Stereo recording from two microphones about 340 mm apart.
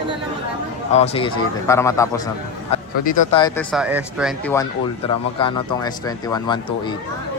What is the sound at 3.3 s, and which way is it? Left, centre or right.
Speech, centre.